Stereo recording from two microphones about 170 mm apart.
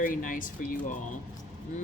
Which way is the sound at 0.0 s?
50° left (ahead or behind).